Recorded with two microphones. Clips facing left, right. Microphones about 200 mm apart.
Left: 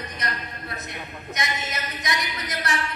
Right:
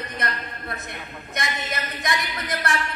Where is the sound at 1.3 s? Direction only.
55° right (ahead or behind).